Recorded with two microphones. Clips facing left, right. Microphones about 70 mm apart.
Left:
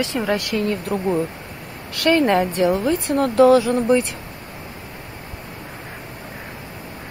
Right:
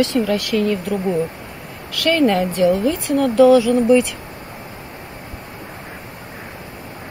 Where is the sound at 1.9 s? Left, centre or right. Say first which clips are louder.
Even; left.